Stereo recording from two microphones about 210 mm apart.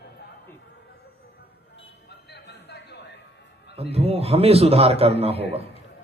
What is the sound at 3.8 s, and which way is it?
A man's voice, 30° right (ahead or behind).